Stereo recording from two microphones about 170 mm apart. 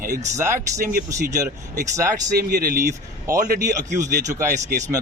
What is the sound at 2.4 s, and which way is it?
Speech, 60° right (ahead or behind).